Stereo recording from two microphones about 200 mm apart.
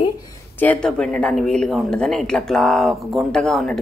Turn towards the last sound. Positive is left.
turn(degrees=0)  # may be behind; listen again after turning